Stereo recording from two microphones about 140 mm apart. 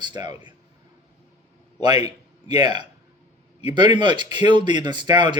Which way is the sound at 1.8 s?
30° right (ahead or behind).